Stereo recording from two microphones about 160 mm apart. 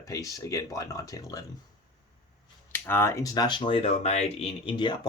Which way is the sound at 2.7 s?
15° left (ahead or behind).